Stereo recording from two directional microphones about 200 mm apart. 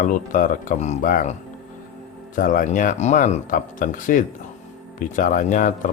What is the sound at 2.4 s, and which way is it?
Speech, 45° left (ahead or behind).